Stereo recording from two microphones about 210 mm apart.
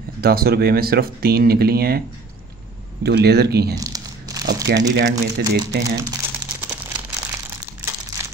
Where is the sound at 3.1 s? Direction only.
50° right (ahead or behind).